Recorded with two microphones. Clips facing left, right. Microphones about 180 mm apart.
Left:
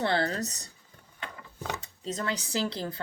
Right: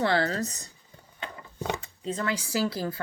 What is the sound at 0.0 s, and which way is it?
Speech, 30° left (ahead or behind).